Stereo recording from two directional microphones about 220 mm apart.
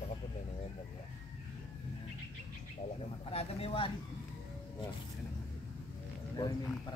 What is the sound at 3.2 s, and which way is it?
Speech, 25° left (ahead or behind).